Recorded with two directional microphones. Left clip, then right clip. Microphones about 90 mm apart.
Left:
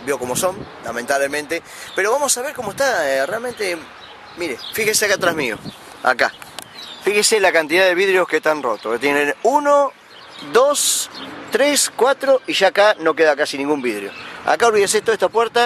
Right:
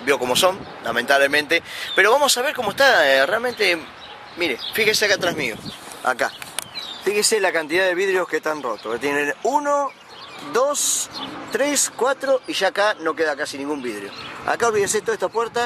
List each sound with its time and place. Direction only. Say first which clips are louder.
0.3 s speech: right 3 dB; centre (ahead or behind); by 5.6 s 20° left (ahead or behind)
7.1 s speech: left 4 dB; 20° left (ahead or behind)